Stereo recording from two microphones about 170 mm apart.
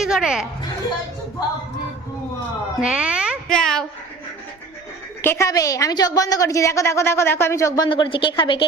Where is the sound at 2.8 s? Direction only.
5° right (ahead or behind).